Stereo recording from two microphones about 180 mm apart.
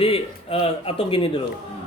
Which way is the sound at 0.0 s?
30° left (ahead or behind).